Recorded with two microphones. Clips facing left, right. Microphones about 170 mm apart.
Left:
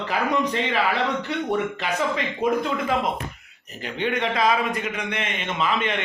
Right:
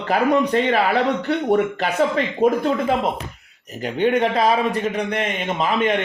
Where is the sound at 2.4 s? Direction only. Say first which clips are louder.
Right 5 dB; 35° right (ahead or behind).